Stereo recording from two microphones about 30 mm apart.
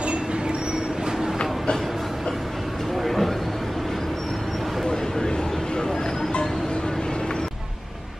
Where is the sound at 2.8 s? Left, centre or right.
Centre.